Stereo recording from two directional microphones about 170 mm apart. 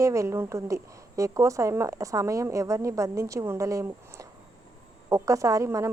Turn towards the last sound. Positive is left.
turn(degrees=-15)  # may be behind; listen again after turning